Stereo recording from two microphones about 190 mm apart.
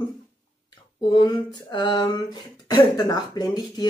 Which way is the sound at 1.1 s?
25° left (ahead or behind).